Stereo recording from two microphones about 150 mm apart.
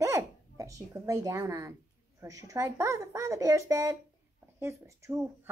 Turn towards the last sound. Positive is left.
turn(degrees=-20)  # may be behind; listen again after turning